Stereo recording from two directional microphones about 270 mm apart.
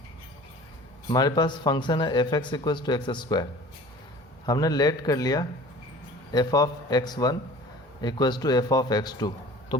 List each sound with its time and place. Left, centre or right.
1.0 s speech: centre
4.4 s speech: centre